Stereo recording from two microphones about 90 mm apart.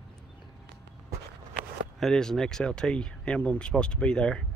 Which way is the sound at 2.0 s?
5° left (ahead or behind).